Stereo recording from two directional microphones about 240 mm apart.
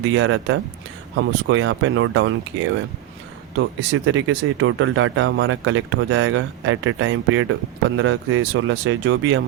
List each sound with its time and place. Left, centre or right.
0.0 s speech: right